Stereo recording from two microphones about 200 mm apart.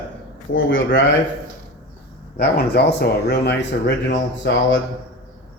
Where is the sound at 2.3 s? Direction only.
55° left (ahead or behind).